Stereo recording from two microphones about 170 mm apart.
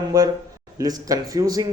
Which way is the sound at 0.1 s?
20° right (ahead or behind).